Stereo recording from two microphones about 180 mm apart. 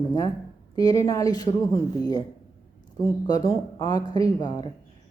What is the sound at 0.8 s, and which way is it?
Speech, 20° left (ahead or behind).